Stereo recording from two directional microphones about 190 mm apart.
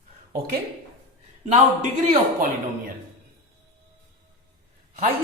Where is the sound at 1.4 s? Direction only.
40° right (ahead or behind).